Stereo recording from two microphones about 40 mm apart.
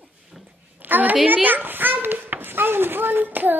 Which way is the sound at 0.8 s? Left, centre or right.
Right.